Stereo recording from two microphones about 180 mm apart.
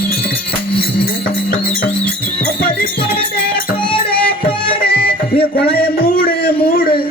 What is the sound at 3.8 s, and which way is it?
Music, 30° left (ahead or behind).